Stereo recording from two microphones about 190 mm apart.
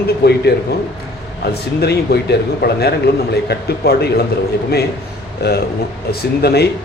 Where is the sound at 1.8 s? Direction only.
55° left (ahead or behind).